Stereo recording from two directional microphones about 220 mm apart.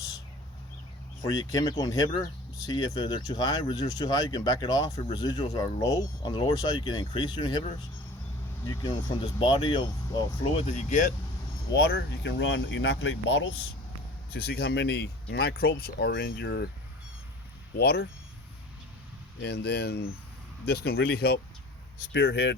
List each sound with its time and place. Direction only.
1.2 s speech: 15° left (ahead or behind)
8.6 s speech: 15° left (ahead or behind); by 11.1 s 35° left (ahead or behind)
11.7 s speech: 45° left (ahead or behind)
14.3 s speech: 45° left (ahead or behind)
17.7 s speech: 45° left (ahead or behind)
19.4 s speech: 45° left (ahead or behind)